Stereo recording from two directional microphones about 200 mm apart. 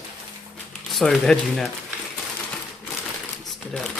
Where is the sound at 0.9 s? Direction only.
Centre (ahead or behind).